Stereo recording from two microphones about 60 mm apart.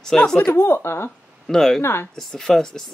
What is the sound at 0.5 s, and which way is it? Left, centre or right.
Speech, left.